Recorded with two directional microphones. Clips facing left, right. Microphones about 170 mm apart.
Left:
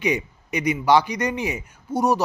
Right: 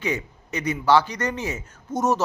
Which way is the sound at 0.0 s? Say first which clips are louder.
Left 4 dB; 15° left (ahead or behind).